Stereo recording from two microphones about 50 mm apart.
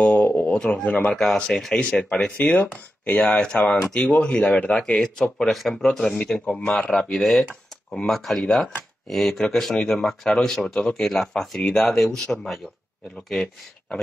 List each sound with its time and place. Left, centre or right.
0.0 s a sound: left
0.6 s speech: centre
0.8 s speech: left
1.1 s speech: centre
3.6 s speech: centre
4.0 s speech: left
4.7 s speech: centre
8.1 s speech: centre